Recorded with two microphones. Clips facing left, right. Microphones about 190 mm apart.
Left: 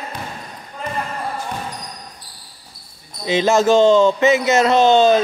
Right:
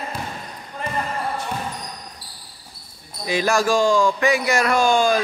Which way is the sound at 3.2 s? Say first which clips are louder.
Left 5 dB; 20° left (ahead or behind).